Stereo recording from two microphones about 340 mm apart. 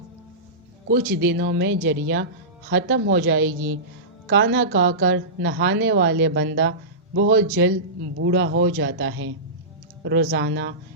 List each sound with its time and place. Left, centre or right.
1.0 s speech: centre
1.3 s a woman's voice: right